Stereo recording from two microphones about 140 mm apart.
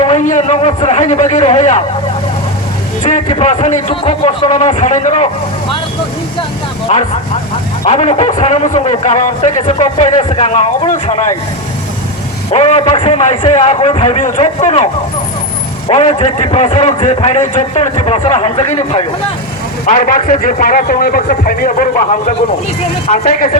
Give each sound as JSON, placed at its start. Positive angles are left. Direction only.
{"t": 0.2, "sound": "a man's voice", "side_deg": 60}
{"t": 3.2, "sound": "a man's voice", "side_deg": 50}
{"t": 4.0, "sound": "a man's voice", "side_deg": 45}
{"t": 6.9, "sound": "a man's voice", "side_deg": 50}
{"t": 9.6, "sound": "a man's voice", "side_deg": 50}
{"t": 12.5, "sound": "a man's voice", "side_deg": 50}
{"t": 14.2, "sound": "a man's voice", "side_deg": 60}
{"t": 15.9, "sound": "a man's voice", "side_deg": 45}
{"t": 19.8, "sound": "a man's voice", "side_deg": 65}
{"t": 23.0, "sound": "a man's voice", "side_deg": 60}